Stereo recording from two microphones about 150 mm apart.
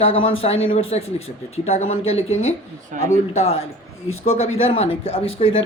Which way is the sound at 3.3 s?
45° left (ahead or behind).